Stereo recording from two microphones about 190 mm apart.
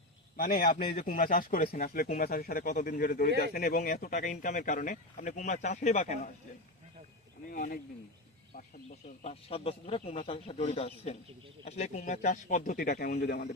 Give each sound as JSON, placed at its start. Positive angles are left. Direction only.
{"t": 0.3, "sound": "a man's voice", "side_deg": 45}
{"t": 7.5, "sound": "a man's voice", "side_deg": 45}